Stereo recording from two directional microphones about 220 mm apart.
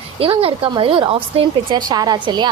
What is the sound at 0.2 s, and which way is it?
A woman's voice, 25° right (ahead or behind).